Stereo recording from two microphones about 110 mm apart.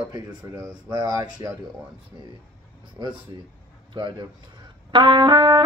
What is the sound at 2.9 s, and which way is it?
Speech, 45° right (ahead or behind).